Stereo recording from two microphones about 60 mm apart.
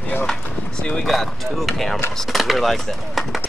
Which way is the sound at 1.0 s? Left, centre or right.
Centre.